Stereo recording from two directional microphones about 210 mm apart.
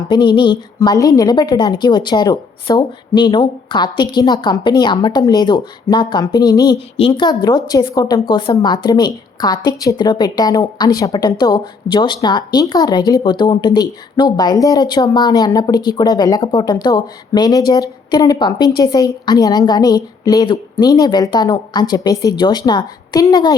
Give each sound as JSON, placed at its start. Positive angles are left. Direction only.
{"t": 0.1, "sound": "a woman's voice", "side_deg": 20}